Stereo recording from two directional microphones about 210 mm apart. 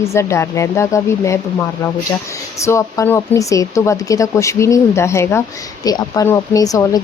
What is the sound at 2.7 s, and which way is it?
Speech, 15° left (ahead or behind).